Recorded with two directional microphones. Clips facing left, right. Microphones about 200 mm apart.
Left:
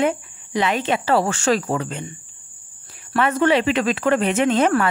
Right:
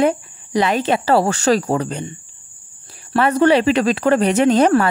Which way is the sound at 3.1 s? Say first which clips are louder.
Right 4 dB; 35° right (ahead or behind).